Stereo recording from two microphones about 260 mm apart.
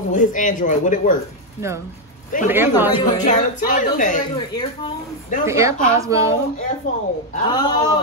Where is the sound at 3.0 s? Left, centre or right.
Left.